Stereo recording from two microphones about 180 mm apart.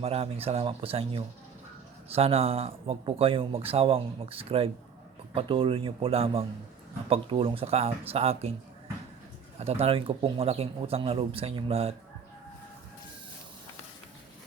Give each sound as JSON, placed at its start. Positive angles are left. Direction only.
{"t": 0.0, "sound": "speech", "side_deg": -30}
{"t": 9.6, "sound": "speech", "side_deg": -35}